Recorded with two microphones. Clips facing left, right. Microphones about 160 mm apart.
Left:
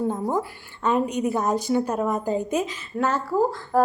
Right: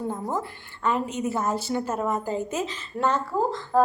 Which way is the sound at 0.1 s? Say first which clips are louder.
Left 4 dB; 15° left (ahead or behind).